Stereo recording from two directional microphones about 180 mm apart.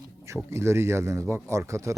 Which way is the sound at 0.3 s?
15° right (ahead or behind).